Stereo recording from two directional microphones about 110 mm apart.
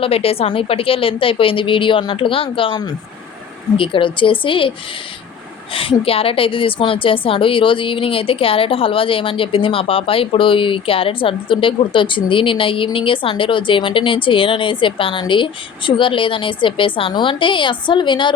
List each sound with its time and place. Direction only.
0.0 s a woman's voice: 60° left (ahead or behind)
3.8 s a woman's voice: 50° left (ahead or behind)
5.7 s a woman's voice: 55° left (ahead or behind)